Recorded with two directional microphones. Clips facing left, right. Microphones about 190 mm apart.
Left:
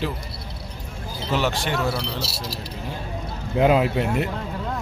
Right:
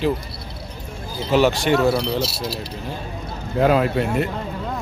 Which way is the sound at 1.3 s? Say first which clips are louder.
Right 8 dB; 15° right (ahead or behind).